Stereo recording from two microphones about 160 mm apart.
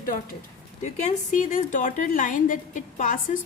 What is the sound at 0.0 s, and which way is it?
Speech, 60° left (ahead or behind).